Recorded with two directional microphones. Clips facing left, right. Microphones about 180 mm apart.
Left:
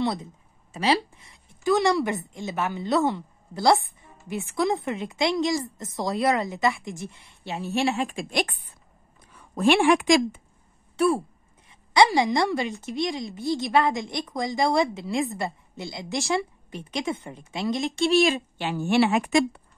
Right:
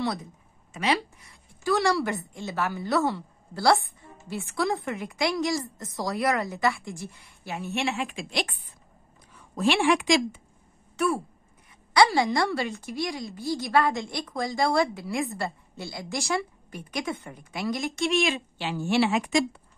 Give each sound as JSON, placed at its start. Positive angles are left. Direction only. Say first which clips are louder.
{"t": 0.0, "sound": "speech", "louder": "left 3 dB", "side_deg": 25}
{"t": 0.7, "sound": "a woman's voice", "louder": "left 3 dB", "side_deg": 35}
{"t": 11.0, "sound": "speech", "louder": "left 4 dB", "side_deg": 30}
{"t": 11.9, "sound": "a woman's voice", "louder": "left 2 dB", "side_deg": 20}
{"t": 18.0, "sound": "speech", "louder": "left 5 dB", "side_deg": 35}
{"t": 18.6, "sound": "a woman's voice", "louder": "left 2 dB", "side_deg": 55}